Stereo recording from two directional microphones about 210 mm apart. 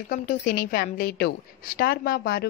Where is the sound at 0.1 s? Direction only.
40° left (ahead or behind).